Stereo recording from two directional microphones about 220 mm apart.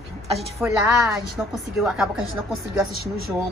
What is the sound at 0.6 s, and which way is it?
A woman's voice, centre (ahead or behind).